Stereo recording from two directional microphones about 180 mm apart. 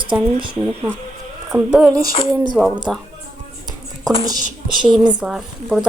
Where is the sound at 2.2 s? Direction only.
15° right (ahead or behind).